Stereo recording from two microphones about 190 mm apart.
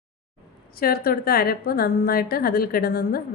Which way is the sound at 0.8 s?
50° left (ahead or behind).